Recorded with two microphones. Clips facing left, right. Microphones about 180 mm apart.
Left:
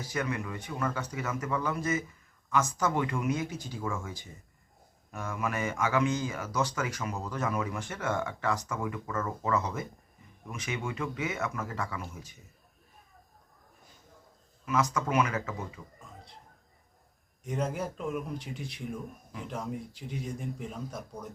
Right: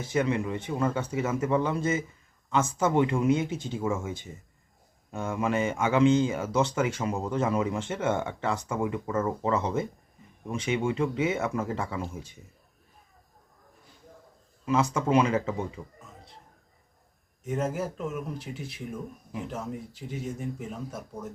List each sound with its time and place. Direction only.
0.0 s speech: 25° right (ahead or behind)
14.6 s speech: 30° right (ahead or behind)
17.4 s speech: 5° right (ahead or behind)